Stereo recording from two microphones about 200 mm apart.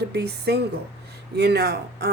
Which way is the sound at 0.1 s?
55° right (ahead or behind).